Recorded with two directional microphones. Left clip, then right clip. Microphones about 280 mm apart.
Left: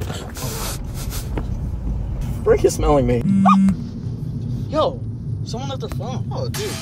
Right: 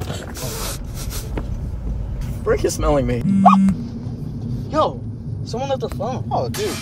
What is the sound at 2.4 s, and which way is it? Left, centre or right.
Speech, centre.